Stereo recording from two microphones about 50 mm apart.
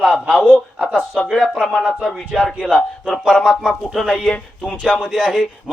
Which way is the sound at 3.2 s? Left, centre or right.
Centre.